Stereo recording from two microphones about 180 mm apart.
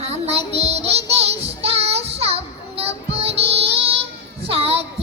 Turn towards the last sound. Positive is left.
turn(degrees=-35)  # may be behind; listen again after turning